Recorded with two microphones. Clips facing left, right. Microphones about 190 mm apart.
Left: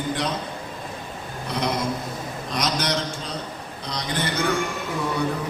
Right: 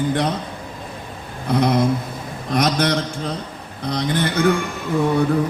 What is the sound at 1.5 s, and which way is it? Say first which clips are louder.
A man's voice: right 8 dB; 55° right (ahead or behind).